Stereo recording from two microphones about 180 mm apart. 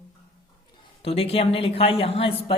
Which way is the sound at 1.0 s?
35° left (ahead or behind).